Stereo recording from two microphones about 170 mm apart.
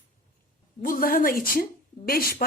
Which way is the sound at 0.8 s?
55° left (ahead or behind).